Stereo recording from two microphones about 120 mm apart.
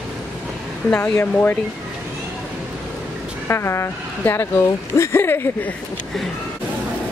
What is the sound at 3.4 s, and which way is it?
Speech, 20° left (ahead or behind).